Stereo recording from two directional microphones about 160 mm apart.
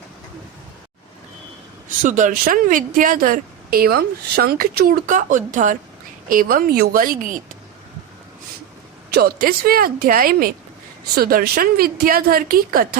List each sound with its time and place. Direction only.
2.0 s speech: 55° right (ahead or behind)
9.1 s speech: 70° right (ahead or behind)